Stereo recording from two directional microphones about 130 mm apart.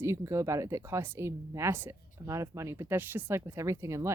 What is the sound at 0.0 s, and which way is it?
Speech, 20° right (ahead or behind).